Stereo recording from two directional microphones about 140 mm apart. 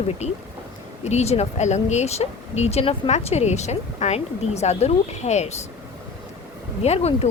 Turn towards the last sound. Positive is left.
turn(degrees=50)  # may be behind; listen again after turning